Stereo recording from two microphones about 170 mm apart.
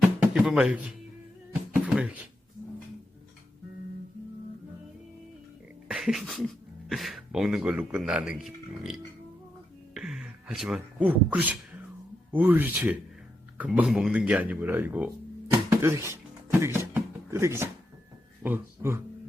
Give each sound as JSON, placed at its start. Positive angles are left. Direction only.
{"t": 0.0, "sound": "speech", "side_deg": 0}
{"t": 1.7, "sound": "a sound", "side_deg": -5}
{"t": 5.9, "sound": "a sound", "side_deg": -5}
{"t": 6.8, "sound": "speech", "side_deg": 0}
{"t": 15.5, "sound": "music", "side_deg": -20}
{"t": 18.4, "sound": "speech", "side_deg": -15}